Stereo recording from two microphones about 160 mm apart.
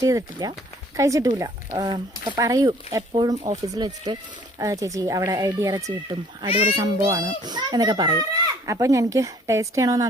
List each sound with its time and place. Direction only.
0.0 s a child's voice: 20° right (ahead or behind)